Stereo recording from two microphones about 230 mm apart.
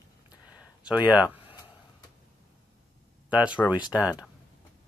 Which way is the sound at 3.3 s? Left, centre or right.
Centre.